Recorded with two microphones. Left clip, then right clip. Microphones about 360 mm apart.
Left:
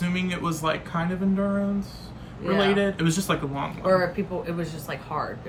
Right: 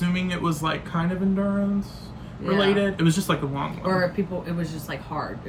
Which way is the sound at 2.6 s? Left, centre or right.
Centre.